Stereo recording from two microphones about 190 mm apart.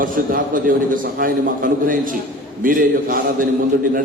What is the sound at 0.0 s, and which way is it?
A man's voice, 45° right (ahead or behind).